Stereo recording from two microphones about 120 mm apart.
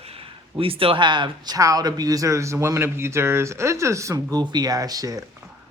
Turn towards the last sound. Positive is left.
turn(degrees=-30)  # may be behind; listen again after turning